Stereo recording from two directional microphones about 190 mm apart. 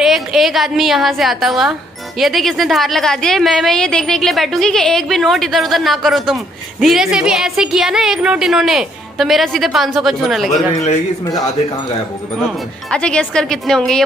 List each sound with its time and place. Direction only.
0.0 s a woman's voice: centre (ahead or behind)
10.5 s speech: 40° left (ahead or behind)
12.4 s a woman's voice: 5° left (ahead or behind)